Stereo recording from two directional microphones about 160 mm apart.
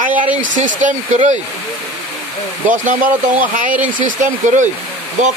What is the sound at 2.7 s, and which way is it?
Speech, 55° right (ahead or behind).